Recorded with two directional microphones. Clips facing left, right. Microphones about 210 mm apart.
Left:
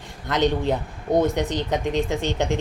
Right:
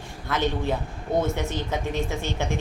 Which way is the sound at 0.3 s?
20° left (ahead or behind).